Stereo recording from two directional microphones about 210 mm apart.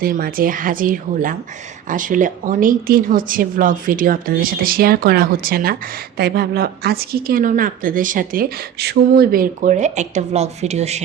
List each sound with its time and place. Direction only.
0.0 s a woman's voice: 45° right (ahead or behind)